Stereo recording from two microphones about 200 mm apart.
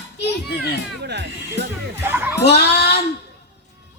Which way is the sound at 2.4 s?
55° left (ahead or behind).